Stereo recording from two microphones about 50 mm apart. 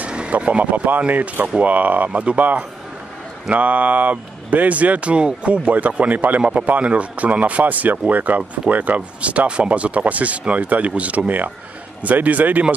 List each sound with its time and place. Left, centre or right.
0.0 s speech: right
0.8 s speech: right